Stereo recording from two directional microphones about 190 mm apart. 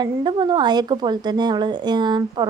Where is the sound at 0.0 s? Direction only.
25° right (ahead or behind).